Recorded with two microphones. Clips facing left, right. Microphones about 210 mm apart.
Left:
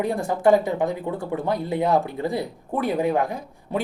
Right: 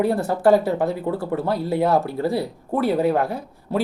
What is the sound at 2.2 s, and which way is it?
Speech, 15° left (ahead or behind).